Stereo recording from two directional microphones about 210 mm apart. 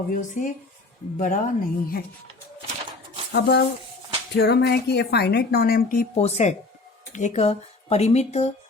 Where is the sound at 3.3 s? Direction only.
55° left (ahead or behind).